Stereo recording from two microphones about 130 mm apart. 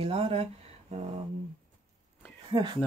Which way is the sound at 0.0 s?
50° right (ahead or behind).